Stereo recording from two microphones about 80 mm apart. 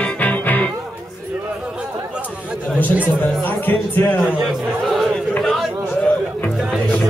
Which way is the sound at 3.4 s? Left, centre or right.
Left.